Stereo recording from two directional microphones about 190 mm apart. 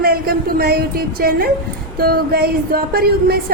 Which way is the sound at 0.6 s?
55° right (ahead or behind).